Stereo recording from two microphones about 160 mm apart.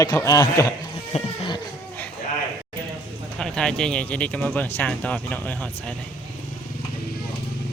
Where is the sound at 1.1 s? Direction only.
45° left (ahead or behind).